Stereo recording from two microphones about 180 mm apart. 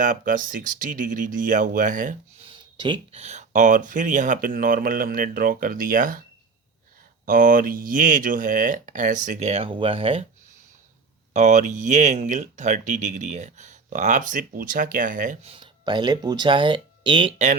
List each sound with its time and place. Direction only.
0.0 s speech: 45° right (ahead or behind)
2.4 s speech: 25° right (ahead or behind); by 6.2 s 50° right (ahead or behind)
7.3 s speech: 50° right (ahead or behind); by 10.2 s 30° right (ahead or behind)
11.3 s speech: 40° right (ahead or behind)
15.4 s speech: 30° right (ahead or behind)